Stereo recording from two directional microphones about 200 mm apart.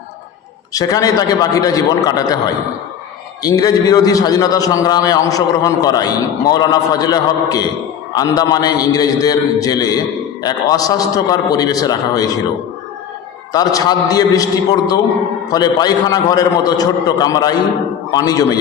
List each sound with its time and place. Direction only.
0.7 s a man's voice: 20° left (ahead or behind)
3.4 s a man's voice: 20° left (ahead or behind)
13.5 s a man's voice: 20° left (ahead or behind)